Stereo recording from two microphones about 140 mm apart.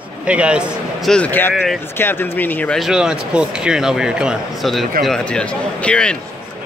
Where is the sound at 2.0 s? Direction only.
15° left (ahead or behind).